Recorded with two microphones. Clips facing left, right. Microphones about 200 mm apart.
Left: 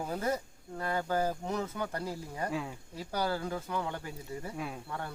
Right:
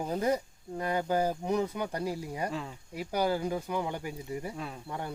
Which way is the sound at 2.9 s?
15° right (ahead or behind).